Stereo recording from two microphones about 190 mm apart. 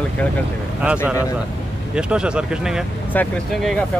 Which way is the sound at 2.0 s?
5° right (ahead or behind).